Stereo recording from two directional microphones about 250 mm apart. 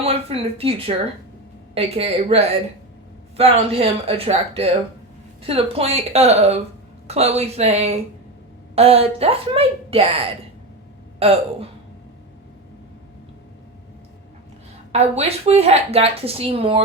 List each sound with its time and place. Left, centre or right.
0.0 s speech: right
14.9 s speech: right